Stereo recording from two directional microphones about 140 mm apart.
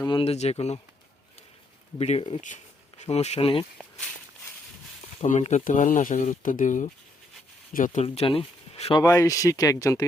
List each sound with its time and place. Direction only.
0.0 s speech: 35° left (ahead or behind)
2.0 s speech: 45° left (ahead or behind)
3.8 s speech: 5° left (ahead or behind)
5.2 s speech: 55° left (ahead or behind); by 8.0 s 70° left (ahead or behind)
8.0 s speech: 45° left (ahead or behind)
9.0 s speech: 25° left (ahead or behind)